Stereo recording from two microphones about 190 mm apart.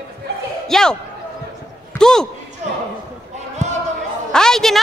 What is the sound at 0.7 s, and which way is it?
Speech, 5° left (ahead or behind).